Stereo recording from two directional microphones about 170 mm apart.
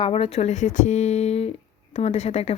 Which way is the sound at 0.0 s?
35° left (ahead or behind).